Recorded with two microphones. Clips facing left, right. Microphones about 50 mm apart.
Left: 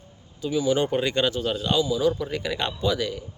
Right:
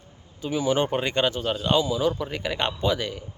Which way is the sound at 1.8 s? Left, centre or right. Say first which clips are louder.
Left 1 dB; right.